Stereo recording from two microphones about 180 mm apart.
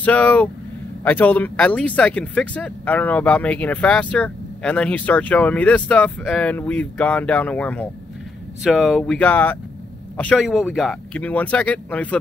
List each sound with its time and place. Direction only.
0.0 s speech: 10° left (ahead or behind)